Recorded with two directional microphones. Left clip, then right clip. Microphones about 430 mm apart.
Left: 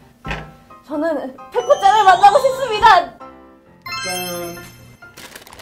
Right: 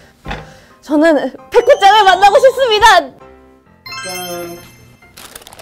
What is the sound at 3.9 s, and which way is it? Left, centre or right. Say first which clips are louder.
Music: even; centre.